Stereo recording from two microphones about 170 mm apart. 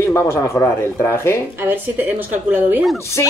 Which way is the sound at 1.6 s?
10° right (ahead or behind).